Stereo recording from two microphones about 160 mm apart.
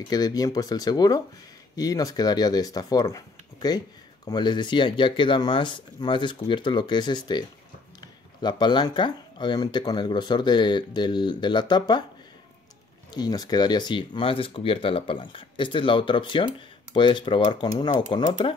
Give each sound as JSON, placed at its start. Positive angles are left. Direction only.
{"t": 0.1, "sound": "speech", "side_deg": 25}
{"t": 13.1, "sound": "speech", "side_deg": 25}